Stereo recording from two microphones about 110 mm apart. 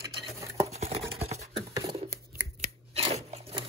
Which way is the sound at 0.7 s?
65° right (ahead or behind).